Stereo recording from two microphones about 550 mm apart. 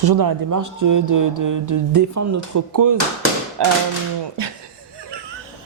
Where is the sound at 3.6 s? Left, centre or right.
Right.